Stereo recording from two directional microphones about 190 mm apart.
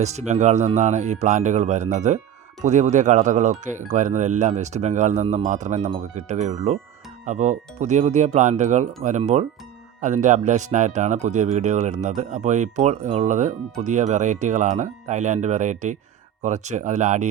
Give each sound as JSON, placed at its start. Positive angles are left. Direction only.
{"t": 0.0, "sound": "speech", "side_deg": -35}